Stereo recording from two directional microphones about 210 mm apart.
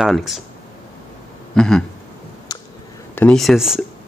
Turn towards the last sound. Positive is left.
turn(degrees=0)  # may be behind; listen again after turning